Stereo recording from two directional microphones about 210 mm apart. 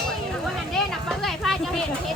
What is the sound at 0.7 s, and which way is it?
Vehicle, centre (ahead or behind).